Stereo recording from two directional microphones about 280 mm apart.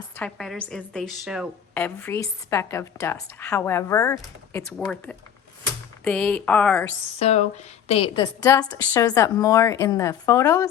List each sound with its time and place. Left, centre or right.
0.2 s a woman's voice: centre
7.2 s a woman's voice: left